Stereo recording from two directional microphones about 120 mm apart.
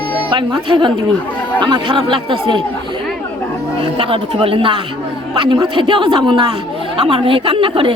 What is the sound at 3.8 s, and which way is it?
A woman's voice, 50° right (ahead or behind).